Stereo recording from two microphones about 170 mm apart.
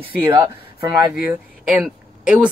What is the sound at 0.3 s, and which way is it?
Speech, 30° right (ahead or behind).